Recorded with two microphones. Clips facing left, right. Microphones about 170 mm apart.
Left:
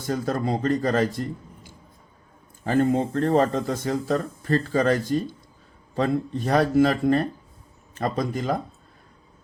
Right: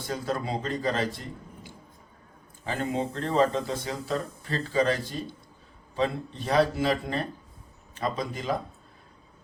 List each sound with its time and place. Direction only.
0.0 s speech: 45° left (ahead or behind)
2.6 s speech: 50° left (ahead or behind)